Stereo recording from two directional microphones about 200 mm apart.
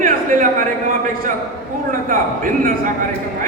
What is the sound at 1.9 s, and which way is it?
Speech, 45° right (ahead or behind).